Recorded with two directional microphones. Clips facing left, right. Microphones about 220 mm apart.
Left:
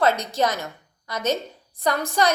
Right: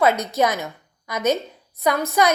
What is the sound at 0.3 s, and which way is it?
A woman's voice, 10° right (ahead or behind).